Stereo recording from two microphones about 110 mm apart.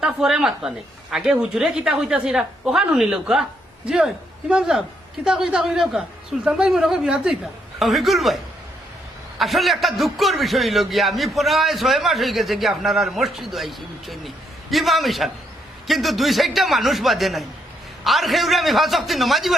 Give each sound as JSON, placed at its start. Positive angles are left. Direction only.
{"t": 0.0, "sound": "a man's voice", "side_deg": -5}
{"t": 9.4, "sound": "a man's voice", "side_deg": 0}